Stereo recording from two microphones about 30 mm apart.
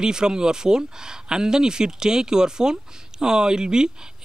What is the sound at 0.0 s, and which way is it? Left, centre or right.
Speech, right.